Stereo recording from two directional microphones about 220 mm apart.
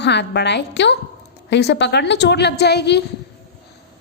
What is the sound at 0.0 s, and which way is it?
Speech, 50° left (ahead or behind).